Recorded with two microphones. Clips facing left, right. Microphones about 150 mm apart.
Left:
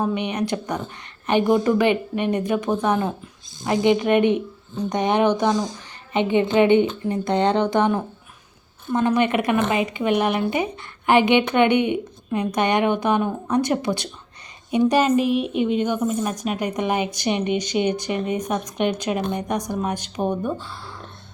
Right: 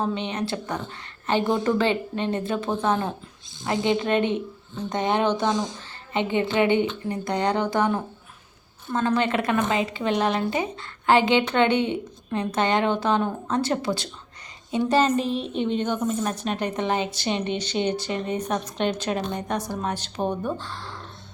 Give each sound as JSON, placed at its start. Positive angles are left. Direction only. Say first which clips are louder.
{"t": 0.0, "sound": "speech", "louder": "left 3 dB", "side_deg": 15}